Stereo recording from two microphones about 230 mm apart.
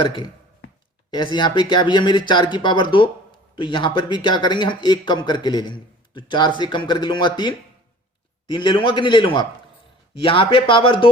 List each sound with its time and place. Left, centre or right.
0.0 s speech: left